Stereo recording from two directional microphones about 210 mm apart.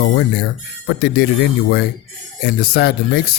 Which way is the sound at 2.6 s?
50° left (ahead or behind).